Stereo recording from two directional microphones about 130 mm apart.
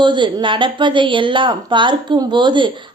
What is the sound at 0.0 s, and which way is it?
A woman's voice, 35° right (ahead or behind).